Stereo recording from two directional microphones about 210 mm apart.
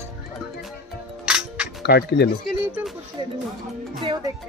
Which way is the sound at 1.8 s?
50° left (ahead or behind).